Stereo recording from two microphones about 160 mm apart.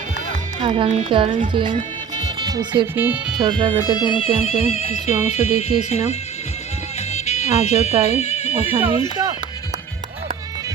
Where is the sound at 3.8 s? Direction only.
25° left (ahead or behind).